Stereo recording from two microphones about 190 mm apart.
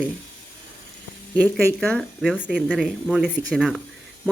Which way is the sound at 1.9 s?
Centre (ahead or behind).